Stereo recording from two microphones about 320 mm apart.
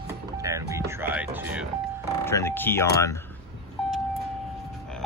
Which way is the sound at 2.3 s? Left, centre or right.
Centre.